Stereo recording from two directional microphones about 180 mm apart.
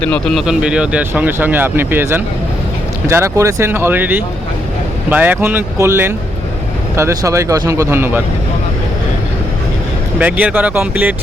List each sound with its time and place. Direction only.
0.0 s speech: 5° left (ahead or behind); by 8.2 s 10° right (ahead or behind)
10.2 s speech: 10° right (ahead or behind)